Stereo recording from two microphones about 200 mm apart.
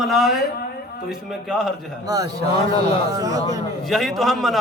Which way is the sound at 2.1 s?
20° right (ahead or behind).